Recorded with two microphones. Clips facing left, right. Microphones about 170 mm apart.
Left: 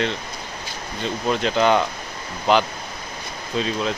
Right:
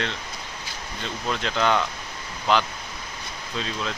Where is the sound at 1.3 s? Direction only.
5° left (ahead or behind).